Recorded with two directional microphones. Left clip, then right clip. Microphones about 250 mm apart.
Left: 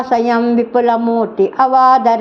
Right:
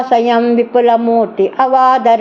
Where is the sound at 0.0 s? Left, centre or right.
Centre.